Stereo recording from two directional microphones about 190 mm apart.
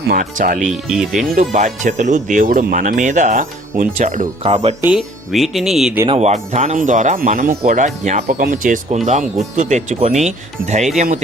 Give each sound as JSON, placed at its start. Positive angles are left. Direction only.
{"t": 0.1, "sound": "speech", "side_deg": -45}
{"t": 0.7, "sound": "speech", "side_deg": 0}
{"t": 1.4, "sound": "speech", "side_deg": -40}
{"t": 4.9, "sound": "speech", "side_deg": 0}
{"t": 6.1, "sound": "speech", "side_deg": -35}